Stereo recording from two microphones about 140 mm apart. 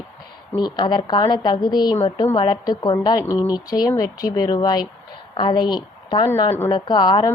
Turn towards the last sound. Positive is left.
turn(degrees=30)  # may be behind; listen again after turning